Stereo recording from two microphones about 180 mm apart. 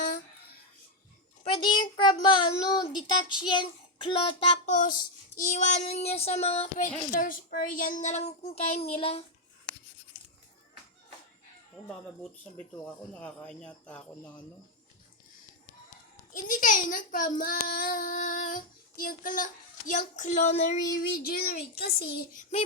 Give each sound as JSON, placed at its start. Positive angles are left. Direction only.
{"t": 1.5, "sound": "a child's voice", "side_deg": 30}
{"t": 4.6, "sound": "child singing", "side_deg": 45}
{"t": 7.1, "sound": "child singing", "side_deg": 50}
{"t": 12.8, "sound": "speech", "side_deg": 5}
{"t": 16.3, "sound": "a child's voice", "side_deg": 45}
{"t": 21.1, "sound": "a child's voice", "side_deg": 55}